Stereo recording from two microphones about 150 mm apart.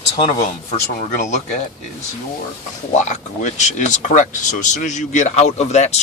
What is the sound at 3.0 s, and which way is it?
Speech, 50° left (ahead or behind).